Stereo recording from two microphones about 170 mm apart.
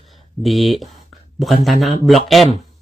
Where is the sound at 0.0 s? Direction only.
Centre (ahead or behind).